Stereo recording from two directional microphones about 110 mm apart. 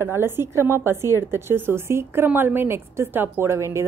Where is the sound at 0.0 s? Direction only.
20° right (ahead or behind).